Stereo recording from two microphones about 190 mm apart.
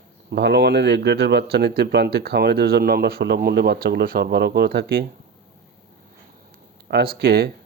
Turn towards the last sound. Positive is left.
turn(degrees=-55)  # may be behind; listen again after turning